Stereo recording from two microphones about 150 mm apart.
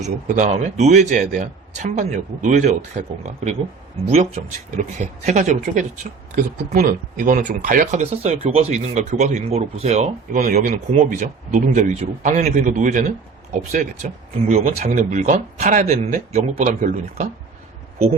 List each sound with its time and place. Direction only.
0.0 s a man's voice: 55° right (ahead or behind)
4.8 s speech: 55° right (ahead or behind)